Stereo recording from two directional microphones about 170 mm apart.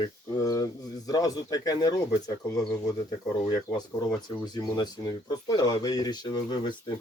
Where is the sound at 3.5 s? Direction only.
25° left (ahead or behind).